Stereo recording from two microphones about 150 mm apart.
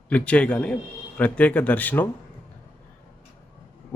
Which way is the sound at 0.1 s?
10° left (ahead or behind).